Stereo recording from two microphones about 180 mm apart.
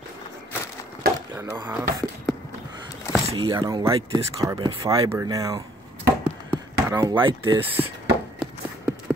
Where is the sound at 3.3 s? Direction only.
20° right (ahead or behind).